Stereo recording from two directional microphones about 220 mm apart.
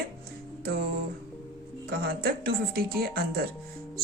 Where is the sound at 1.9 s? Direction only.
45° right (ahead or behind).